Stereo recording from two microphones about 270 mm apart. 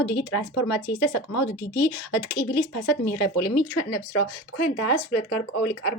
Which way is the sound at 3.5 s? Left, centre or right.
Left.